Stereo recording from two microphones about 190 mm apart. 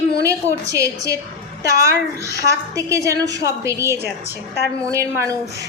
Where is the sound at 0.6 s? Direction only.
15° right (ahead or behind).